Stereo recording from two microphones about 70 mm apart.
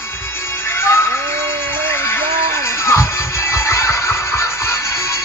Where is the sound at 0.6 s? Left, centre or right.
Left.